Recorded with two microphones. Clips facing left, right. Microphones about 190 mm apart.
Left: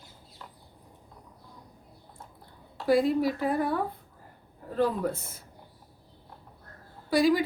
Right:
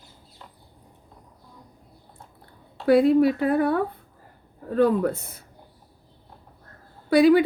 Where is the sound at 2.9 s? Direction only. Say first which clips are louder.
Right 7 dB; 65° right (ahead or behind).